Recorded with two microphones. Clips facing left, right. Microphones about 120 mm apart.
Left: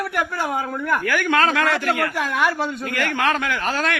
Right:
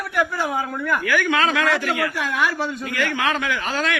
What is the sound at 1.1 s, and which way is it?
A man's voice, 50° left (ahead or behind).